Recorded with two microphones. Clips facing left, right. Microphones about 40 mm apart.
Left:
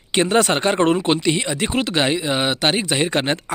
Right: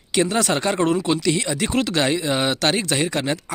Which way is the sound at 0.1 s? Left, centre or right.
Left.